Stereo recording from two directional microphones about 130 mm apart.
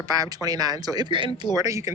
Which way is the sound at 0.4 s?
30° right (ahead or behind).